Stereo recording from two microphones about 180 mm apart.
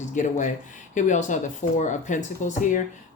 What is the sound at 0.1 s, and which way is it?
Speech, 45° left (ahead or behind).